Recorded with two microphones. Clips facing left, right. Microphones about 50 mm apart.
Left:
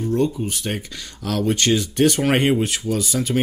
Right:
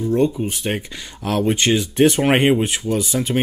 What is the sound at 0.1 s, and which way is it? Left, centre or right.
Speech, right.